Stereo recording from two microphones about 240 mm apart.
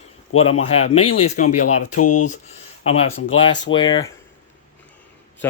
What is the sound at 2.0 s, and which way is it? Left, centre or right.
Speech, left.